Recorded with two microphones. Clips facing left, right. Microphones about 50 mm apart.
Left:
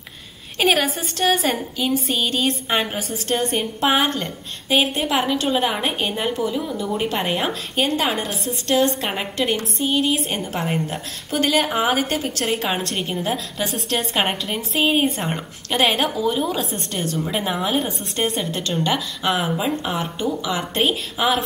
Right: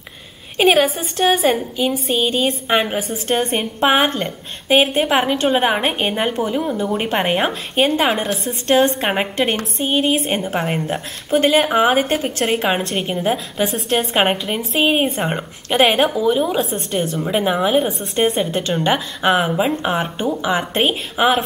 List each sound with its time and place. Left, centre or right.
0.6 s a woman's voice: centre
3.1 s a woman's voice: right
12.6 s a woman's voice: centre
17.3 s a woman's voice: centre; by 21.5 s right